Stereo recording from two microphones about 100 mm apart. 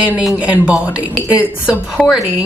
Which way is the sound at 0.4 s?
15° right (ahead or behind).